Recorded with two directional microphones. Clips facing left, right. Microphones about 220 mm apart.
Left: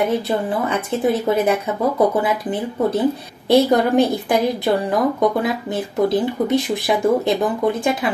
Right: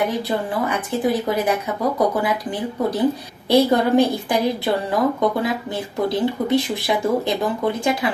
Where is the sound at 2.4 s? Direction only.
20° left (ahead or behind).